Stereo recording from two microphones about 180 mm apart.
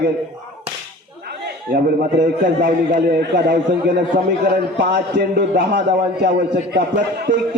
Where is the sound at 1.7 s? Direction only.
60° right (ahead or behind).